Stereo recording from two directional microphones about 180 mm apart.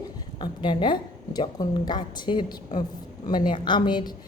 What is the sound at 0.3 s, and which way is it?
A woman's voice, 25° left (ahead or behind).